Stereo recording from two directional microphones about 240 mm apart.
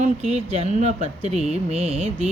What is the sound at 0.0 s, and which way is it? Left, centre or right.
Mantra, right.